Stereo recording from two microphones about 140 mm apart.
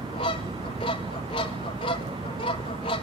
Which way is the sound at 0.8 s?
40° left (ahead or behind).